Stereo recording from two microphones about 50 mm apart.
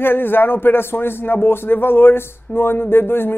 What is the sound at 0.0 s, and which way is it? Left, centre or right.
Speech, left.